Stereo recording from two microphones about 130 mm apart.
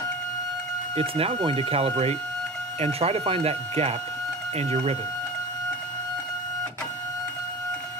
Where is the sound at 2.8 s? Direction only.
50° right (ahead or behind).